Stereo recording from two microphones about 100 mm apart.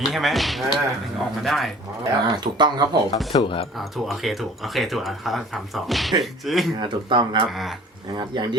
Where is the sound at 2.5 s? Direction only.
45° right (ahead or behind).